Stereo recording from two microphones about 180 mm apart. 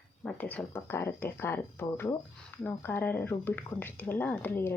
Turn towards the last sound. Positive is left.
turn(degrees=10)  # may be behind; listen again after turning